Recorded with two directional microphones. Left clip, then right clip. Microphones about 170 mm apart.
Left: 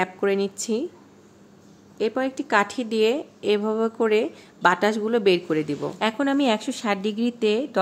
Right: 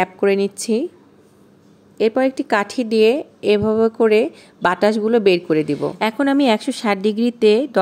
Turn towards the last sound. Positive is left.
turn(degrees=-30)  # may be behind; listen again after turning